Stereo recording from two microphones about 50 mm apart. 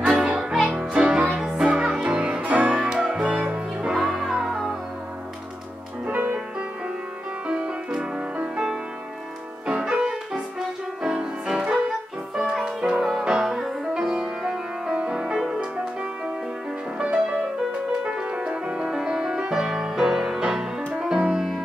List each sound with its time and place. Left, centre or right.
0.0 s music: centre
3.9 s music: centre
4.5 s music: centre
6.0 s music: right
7.4 s music: right